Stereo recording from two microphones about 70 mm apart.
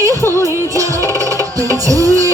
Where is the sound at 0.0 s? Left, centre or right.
Right.